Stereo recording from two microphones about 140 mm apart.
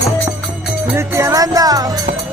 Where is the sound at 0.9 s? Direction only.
20° right (ahead or behind).